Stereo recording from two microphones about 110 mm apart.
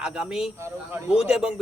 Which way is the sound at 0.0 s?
5° right (ahead or behind).